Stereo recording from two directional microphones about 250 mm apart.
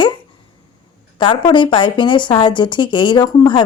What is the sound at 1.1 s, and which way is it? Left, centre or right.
A woman's voice, centre.